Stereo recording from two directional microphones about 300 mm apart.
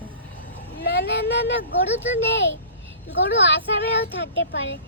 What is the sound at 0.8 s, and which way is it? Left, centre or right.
Speech, left.